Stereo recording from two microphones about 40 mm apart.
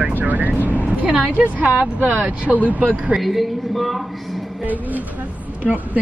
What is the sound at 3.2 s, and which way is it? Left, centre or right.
Speech, centre.